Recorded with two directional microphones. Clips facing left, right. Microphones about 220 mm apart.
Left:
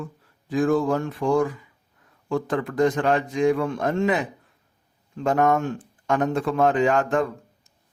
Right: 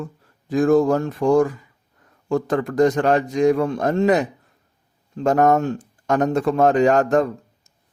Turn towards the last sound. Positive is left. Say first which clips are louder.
# right 5 dB
turn(degrees=-40)  # may be behind; listen again after turning